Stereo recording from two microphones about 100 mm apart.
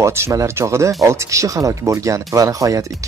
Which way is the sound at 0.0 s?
30° right (ahead or behind).